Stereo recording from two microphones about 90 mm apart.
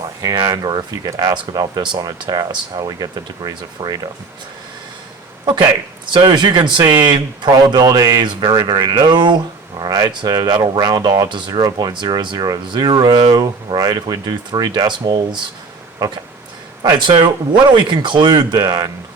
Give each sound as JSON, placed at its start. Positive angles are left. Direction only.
{"t": 0.4, "sound": "speech", "side_deg": -45}
{"t": 6.1, "sound": "speech", "side_deg": -60}
{"t": 11.3, "sound": "speech", "side_deg": -60}
{"t": 16.0, "sound": "speech", "side_deg": -45}
{"t": 16.8, "sound": "speech", "side_deg": -60}